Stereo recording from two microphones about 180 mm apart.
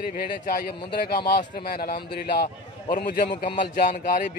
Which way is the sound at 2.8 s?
25° left (ahead or behind).